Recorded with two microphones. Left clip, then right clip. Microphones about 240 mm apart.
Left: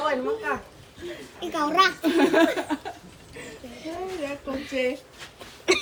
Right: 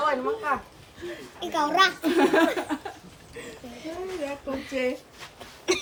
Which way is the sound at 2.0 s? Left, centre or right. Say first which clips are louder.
Left 1 dB; right.